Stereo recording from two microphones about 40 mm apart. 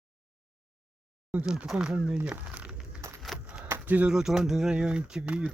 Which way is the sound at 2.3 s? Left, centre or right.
Right.